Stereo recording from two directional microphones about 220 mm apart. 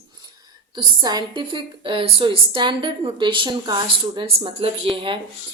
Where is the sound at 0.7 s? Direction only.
20° right (ahead or behind).